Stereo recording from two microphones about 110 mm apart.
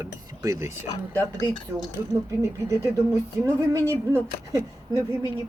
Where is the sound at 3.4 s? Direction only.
25° right (ahead or behind).